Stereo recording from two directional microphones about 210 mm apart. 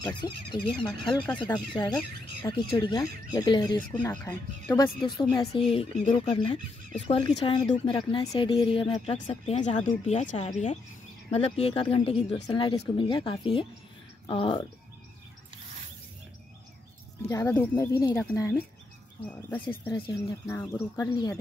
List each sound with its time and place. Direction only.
0.0 s speech: 20° left (ahead or behind)
0.8 s speech: centre (ahead or behind)
1.3 s speech: 20° left (ahead or behind)
4.0 s speech: 10° left (ahead or behind); by 14.7 s 25° left (ahead or behind)
17.3 s speech: 10° left (ahead or behind)